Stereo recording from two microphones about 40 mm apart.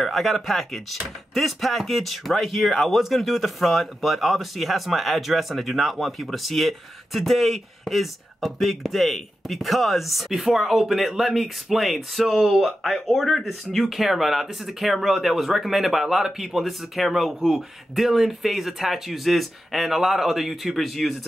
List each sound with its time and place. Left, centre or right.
0.0 s speech: centre